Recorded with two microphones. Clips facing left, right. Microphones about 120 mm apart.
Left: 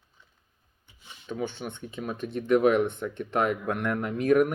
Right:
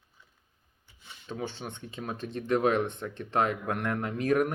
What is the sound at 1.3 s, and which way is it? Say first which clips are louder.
Speech: left 4 dB; 35° right (ahead or behind).